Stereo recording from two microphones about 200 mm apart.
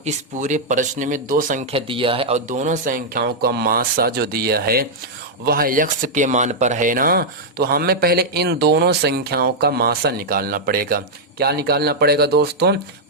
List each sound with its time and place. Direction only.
0.0 s speech: 35° right (ahead or behind)
1.7 s speech: 25° right (ahead or behind); by 12.7 s 55° right (ahead or behind)